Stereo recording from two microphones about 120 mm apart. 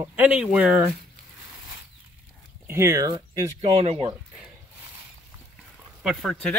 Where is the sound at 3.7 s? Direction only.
60° right (ahead or behind).